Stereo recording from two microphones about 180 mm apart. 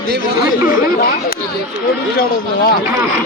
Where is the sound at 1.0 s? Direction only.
50° left (ahead or behind).